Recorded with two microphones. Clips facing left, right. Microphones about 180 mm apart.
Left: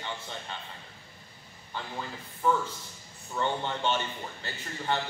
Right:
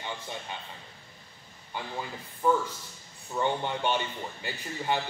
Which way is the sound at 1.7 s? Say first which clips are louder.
Right 1 dB; 15° right (ahead or behind).